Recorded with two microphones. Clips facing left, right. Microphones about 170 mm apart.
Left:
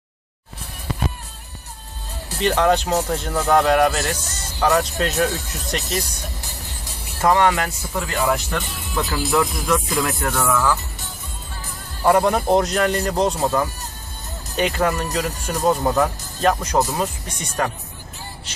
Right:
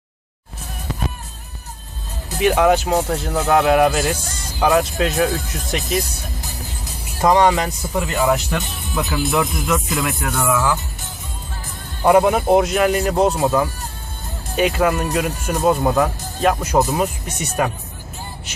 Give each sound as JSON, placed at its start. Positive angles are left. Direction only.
{"t": 2.4, "sound": "speech", "side_deg": -10}
{"t": 7.2, "sound": "speech", "side_deg": -15}
{"t": 8.1, "sound": "speech", "side_deg": -5}
{"t": 12.0, "sound": "speech", "side_deg": -10}